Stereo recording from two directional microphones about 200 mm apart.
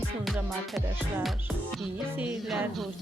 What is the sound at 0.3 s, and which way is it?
Music, centre (ahead or behind).